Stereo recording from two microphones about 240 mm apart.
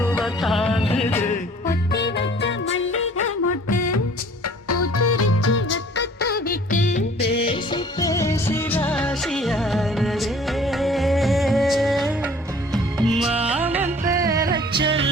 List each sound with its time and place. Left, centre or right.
0.0 s music: centre
1.3 s music: left
4.7 s music: left
7.4 s music: centre